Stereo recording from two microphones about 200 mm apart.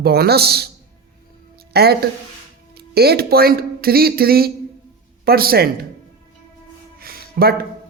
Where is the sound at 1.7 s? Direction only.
50° right (ahead or behind).